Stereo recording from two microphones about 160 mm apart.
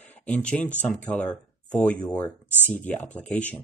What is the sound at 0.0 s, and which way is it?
Speech, 10° left (ahead or behind).